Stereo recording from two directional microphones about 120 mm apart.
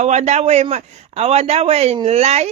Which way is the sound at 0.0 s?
70° right (ahead or behind).